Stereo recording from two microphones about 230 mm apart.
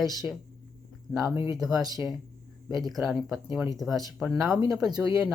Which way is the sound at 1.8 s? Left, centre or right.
Centre.